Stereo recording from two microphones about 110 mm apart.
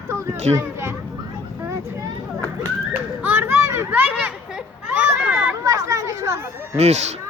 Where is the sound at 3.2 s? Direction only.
15° right (ahead or behind).